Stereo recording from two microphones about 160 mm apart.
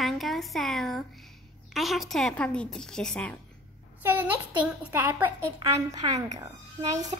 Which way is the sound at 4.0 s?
10° right (ahead or behind).